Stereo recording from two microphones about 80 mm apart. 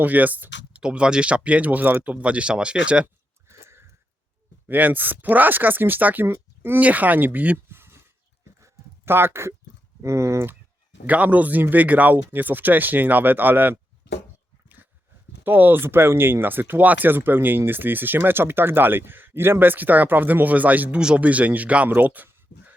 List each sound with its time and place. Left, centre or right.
0.0 s speech: centre
0.8 s speech: centre
3.5 s a sound: right
4.7 s speech: right
7.3 s a sound: right
10.0 s speech: right
11.0 s speech: centre
15.4 s speech: right